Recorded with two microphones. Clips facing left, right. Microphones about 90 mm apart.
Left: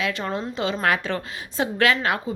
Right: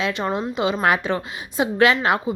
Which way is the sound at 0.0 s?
20° right (ahead or behind).